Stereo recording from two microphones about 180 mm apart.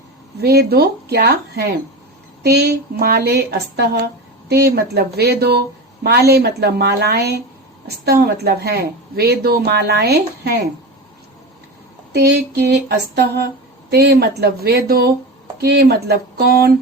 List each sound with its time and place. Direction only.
0.3 s a woman's voice: 65° right (ahead or behind)
12.1 s a woman's voice: 65° right (ahead or behind)